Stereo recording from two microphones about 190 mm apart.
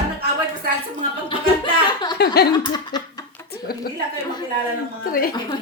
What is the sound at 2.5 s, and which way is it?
Laughter, 20° left (ahead or behind).